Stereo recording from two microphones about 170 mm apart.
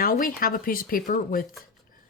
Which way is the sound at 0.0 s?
55° left (ahead or behind).